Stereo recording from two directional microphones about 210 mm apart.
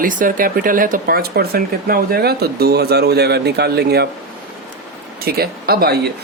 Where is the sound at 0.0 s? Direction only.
40° right (ahead or behind).